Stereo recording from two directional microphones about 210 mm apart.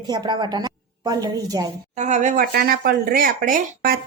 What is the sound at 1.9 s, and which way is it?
Speech, 35° right (ahead or behind).